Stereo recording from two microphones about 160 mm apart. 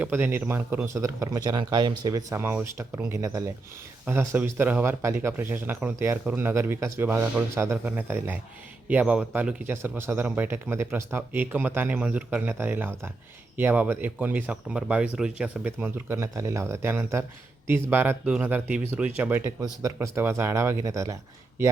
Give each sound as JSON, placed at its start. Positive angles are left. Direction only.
{"t": 0.0, "sound": "speech", "side_deg": -10}